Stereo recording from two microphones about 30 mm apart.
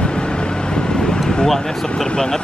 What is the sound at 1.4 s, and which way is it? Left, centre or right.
Speech, left.